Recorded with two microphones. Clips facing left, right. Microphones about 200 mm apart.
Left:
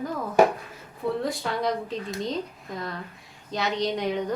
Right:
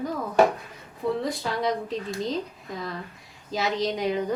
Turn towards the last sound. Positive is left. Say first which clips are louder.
# right 1 dB
turn(degrees=0)  # may be behind; listen again after turning